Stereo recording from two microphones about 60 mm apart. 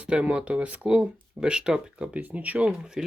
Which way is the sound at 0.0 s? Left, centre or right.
Centre.